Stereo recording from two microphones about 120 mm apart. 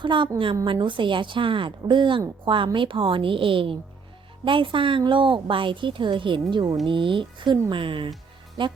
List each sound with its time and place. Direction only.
0.0 s a woman's voice: 40° right (ahead or behind)